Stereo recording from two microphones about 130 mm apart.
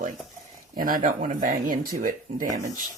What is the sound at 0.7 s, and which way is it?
Speech, 90° right.